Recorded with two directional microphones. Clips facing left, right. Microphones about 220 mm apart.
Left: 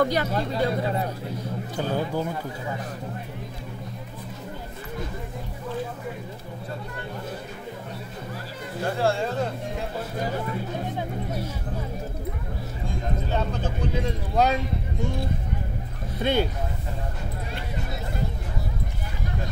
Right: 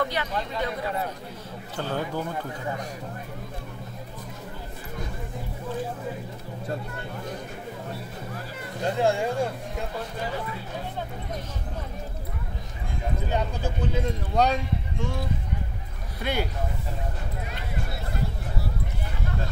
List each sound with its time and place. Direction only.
0.0 s speech: 45° left (ahead or behind)
1.8 s speech: 15° left (ahead or behind)
8.8 s speech: 20° right (ahead or behind)
13.3 s speech: 10° right (ahead or behind)
14.4 s speech: centre (ahead or behind)
16.2 s speech: 25° left (ahead or behind)